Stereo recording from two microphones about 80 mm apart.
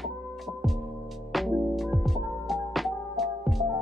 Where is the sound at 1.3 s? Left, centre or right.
Centre.